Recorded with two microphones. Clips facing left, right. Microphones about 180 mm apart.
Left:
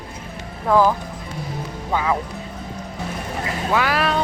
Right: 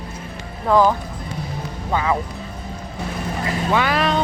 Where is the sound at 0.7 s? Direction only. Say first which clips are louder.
Right 1 dB; 5° left (ahead or behind).